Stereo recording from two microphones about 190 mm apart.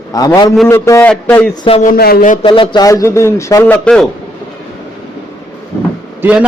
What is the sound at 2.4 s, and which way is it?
A man's voice, 25° left (ahead or behind).